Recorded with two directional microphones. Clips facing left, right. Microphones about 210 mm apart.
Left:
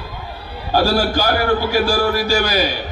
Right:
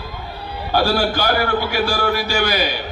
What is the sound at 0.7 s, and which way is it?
A man's voice, 40° left (ahead or behind).